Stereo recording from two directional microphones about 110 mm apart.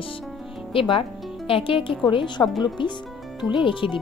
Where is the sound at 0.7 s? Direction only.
50° left (ahead or behind).